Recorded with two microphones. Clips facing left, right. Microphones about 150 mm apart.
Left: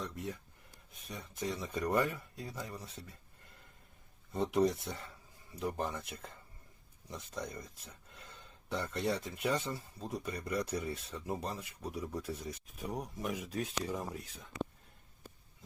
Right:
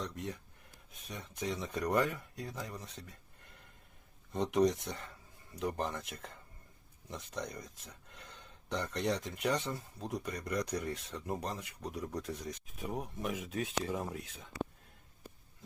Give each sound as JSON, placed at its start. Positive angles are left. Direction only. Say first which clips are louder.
{"t": 0.0, "sound": "speech", "louder": "even", "side_deg": 5}